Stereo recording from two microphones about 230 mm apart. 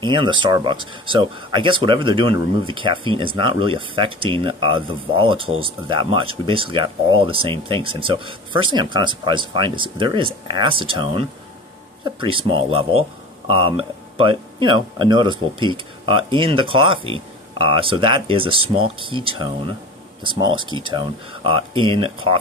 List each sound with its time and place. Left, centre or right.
0.0 s speech: right